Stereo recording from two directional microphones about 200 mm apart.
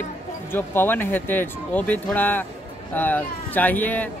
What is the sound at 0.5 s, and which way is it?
Speech, 10° left (ahead or behind).